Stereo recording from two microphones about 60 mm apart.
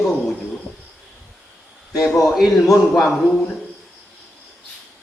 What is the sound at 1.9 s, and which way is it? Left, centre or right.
Speech, left.